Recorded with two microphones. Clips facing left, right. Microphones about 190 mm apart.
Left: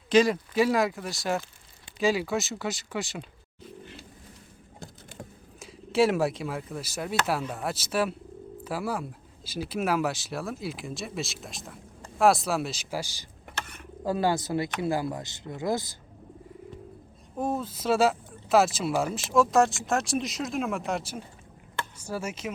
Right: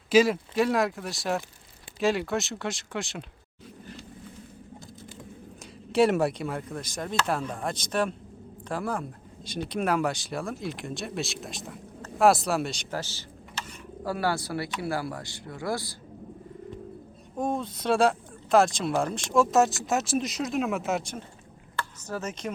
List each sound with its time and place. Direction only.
0.1 s speech: 5° right (ahead or behind)
5.9 s speech: centre (ahead or behind)
13.6 s bird: 60° left (ahead or behind)
14.0 s speech: 20° left (ahead or behind)
17.3 s speech: 5° left (ahead or behind)